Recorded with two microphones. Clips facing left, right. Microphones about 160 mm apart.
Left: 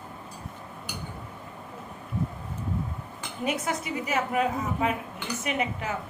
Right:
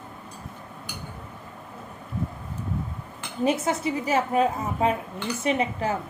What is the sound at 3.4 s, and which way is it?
A woman's voice, 25° right (ahead or behind).